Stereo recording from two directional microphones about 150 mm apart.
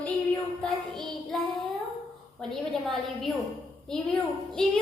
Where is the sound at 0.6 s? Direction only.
Centre (ahead or behind).